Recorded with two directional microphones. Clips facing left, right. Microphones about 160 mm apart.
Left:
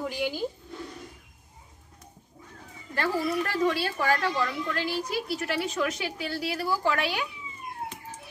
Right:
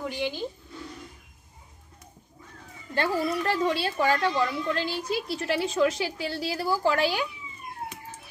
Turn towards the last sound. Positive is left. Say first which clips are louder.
# right 3 dB
turn(degrees=-30)  # may be behind; listen again after turning